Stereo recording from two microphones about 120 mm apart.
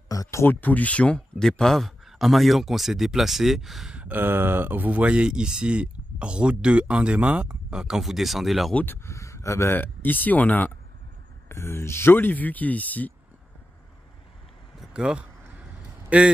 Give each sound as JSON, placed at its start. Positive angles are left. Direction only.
{"t": 0.1, "sound": "speech", "side_deg": 25}
{"t": 8.7, "sound": "speech", "side_deg": 20}
{"t": 14.8, "sound": "vehicle", "side_deg": -5}
{"t": 16.1, "sound": "speech", "side_deg": -10}